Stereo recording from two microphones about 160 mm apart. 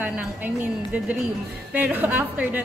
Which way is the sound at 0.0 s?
10° right (ahead or behind).